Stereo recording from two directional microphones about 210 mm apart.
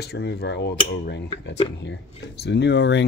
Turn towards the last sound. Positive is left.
turn(degrees=55)  # may be behind; listen again after turning